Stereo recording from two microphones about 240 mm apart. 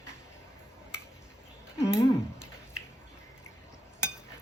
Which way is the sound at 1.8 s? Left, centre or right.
Centre.